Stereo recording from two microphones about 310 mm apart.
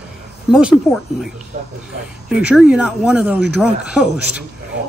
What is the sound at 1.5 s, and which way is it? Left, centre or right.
Speech, right.